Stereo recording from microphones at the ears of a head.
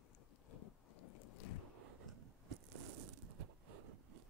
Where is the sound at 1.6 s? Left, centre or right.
Right.